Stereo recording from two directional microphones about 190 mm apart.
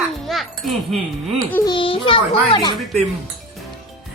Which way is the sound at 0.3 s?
Centre (ahead or behind).